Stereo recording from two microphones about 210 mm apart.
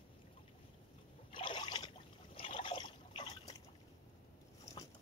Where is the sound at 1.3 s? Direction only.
25° left (ahead or behind).